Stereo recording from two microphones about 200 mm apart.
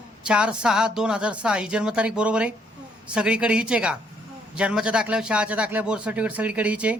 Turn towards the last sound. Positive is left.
turn(degrees=-5)  # may be behind; listen again after turning